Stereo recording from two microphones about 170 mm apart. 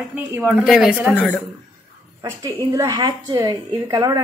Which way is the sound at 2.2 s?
15° right (ahead or behind).